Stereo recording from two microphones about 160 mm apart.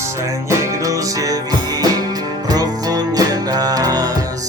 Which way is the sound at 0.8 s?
20° right (ahead or behind).